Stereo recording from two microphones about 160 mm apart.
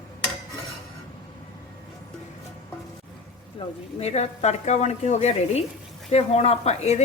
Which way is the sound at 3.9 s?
45° left (ahead or behind).